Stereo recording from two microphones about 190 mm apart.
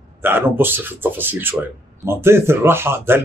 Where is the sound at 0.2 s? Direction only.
10° right (ahead or behind).